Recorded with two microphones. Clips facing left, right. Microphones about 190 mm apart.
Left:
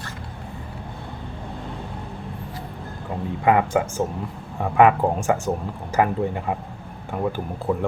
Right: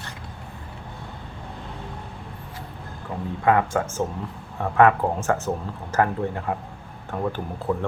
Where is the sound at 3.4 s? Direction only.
15° left (ahead or behind).